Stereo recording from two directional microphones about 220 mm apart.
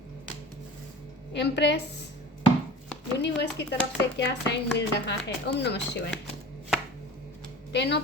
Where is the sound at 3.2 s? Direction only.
50° left (ahead or behind).